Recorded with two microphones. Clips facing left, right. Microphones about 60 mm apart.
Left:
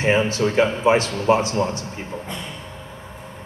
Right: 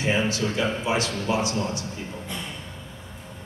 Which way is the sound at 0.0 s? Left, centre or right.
Left.